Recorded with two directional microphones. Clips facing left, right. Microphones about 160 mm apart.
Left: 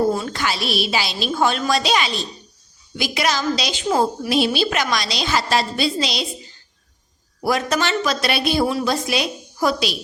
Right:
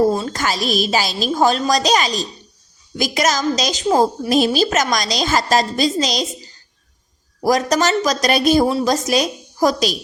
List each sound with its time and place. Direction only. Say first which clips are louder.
0.1 s a woman's voice: right 2 dB; 35° right (ahead or behind)